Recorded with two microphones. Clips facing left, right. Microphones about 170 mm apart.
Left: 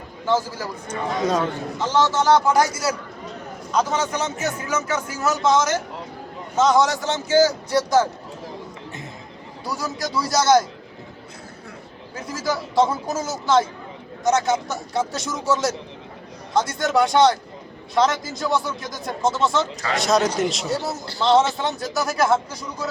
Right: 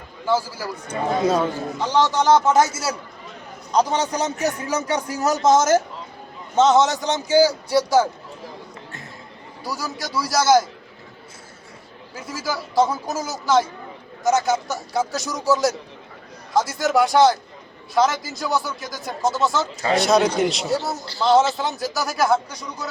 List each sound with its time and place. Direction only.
0.3 s a man's voice: 10° right (ahead or behind); by 5.8 s 45° right (ahead or behind)
6.6 s a man's voice: 25° right (ahead or behind); by 8.0 s 10° right (ahead or behind)
9.6 s a man's voice: centre (ahead or behind)
12.3 s a man's voice: centre (ahead or behind)